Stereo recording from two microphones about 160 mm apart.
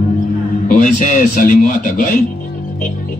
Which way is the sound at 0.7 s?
55° left (ahead or behind).